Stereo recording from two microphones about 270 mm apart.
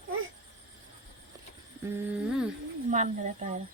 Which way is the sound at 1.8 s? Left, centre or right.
Centre.